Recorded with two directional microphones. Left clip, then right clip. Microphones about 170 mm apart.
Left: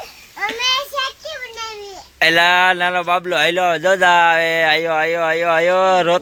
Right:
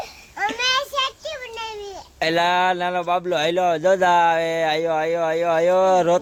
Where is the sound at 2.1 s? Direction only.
5° right (ahead or behind).